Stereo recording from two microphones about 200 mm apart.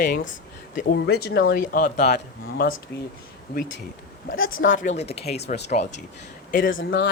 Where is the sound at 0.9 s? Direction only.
55° left (ahead or behind).